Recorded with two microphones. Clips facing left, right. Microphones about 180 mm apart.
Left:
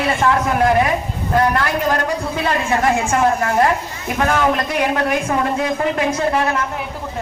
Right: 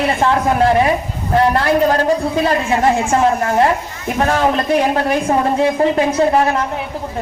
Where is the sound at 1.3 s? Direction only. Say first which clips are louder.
Right 3 dB; 30° right (ahead or behind).